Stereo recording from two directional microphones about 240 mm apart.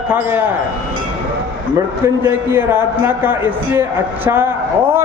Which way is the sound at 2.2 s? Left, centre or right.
Centre.